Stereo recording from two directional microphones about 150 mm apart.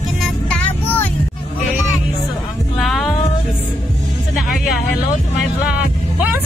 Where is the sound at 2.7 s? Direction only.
Centre (ahead or behind).